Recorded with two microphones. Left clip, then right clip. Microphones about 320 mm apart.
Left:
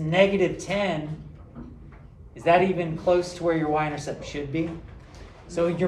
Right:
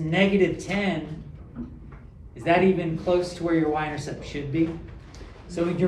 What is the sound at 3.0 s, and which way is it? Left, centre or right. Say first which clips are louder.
Speech: left 2 dB; centre.